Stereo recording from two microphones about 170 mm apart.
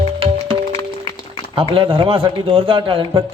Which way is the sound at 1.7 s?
30° right (ahead or behind).